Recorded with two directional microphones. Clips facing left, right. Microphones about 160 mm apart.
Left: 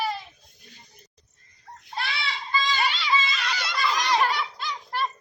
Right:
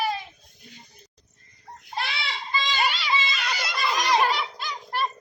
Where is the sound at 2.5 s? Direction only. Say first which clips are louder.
Even; 15° right (ahead or behind).